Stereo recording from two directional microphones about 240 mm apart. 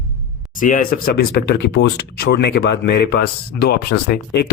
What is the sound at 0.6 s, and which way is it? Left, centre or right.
Speech, left.